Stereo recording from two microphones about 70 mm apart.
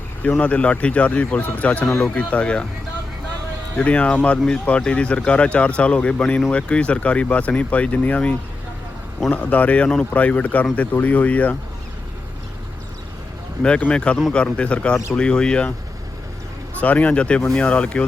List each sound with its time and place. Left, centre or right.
0.2 s speech: centre
3.8 s speech: centre
13.6 s speech: centre
16.8 s speech: left